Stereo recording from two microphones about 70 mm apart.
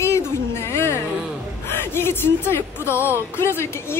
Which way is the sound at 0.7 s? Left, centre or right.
Left.